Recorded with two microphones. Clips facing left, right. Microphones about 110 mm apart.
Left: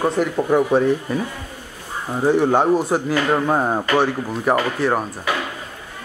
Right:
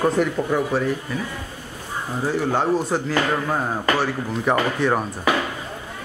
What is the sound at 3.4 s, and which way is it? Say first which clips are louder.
Speech: left 5 dB; 25° left (ahead or behind).